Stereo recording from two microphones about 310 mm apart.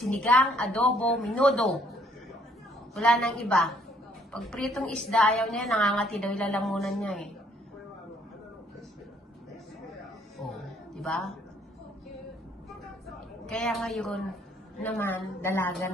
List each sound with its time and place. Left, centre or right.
0.0 s a woman's voice: centre
11.0 s a woman's voice: centre
13.5 s a woman's voice: centre